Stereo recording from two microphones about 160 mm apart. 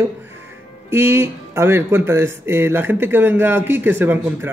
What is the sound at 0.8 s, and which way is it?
Speech, 15° right (ahead or behind).